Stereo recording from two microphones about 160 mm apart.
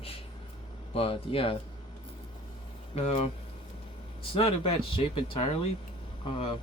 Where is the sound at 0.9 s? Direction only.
35° left (ahead or behind).